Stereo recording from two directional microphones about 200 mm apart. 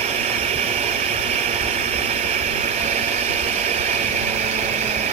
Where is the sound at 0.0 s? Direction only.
30° right (ahead or behind).